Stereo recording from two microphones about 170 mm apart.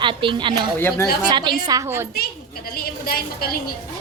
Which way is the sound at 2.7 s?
60° left (ahead or behind).